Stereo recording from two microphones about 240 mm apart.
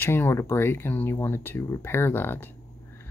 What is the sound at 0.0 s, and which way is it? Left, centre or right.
Speech, centre.